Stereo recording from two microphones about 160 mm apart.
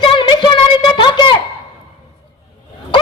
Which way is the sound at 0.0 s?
30° left (ahead or behind).